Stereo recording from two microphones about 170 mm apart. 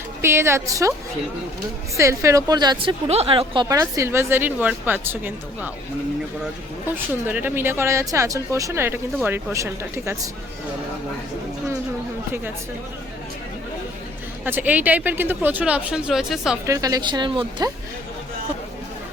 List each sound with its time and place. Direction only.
0.2 s a woman's voice: 15° right (ahead or behind)
2.0 s a woman's voice: 15° right (ahead or behind)
3.1 s a woman's voice: 35° right (ahead or behind); by 10.2 s 15° right (ahead or behind)
14.4 s a woman's voice: 10° right (ahead or behind)
16.6 s a woman's voice: 20° right (ahead or behind)